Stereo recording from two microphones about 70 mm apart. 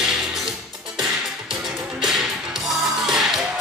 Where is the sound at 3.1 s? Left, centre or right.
Centre.